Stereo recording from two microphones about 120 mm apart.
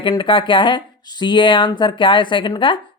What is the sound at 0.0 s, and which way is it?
Speech, 40° left (ahead or behind).